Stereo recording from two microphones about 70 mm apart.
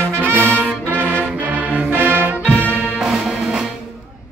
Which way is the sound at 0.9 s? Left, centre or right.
Right.